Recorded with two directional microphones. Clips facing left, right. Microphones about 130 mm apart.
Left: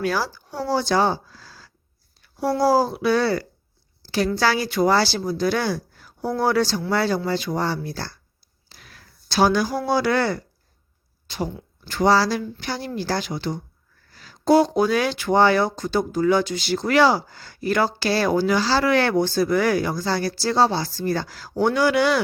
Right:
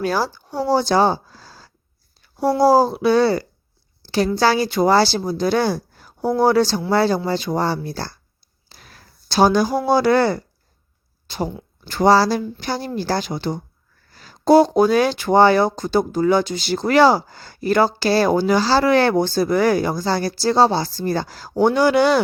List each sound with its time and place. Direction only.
0.0 s speech: 30° right (ahead or behind)
11.9 s speech: 35° right (ahead or behind)